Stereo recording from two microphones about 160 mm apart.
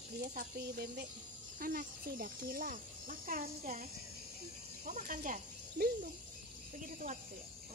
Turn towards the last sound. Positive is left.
turn(degrees=-50)  # may be behind; listen again after turning